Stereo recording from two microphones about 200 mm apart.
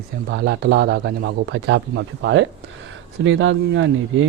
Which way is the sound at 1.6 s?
70° right (ahead or behind).